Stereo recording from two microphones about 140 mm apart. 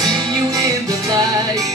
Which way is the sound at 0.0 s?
30° right (ahead or behind).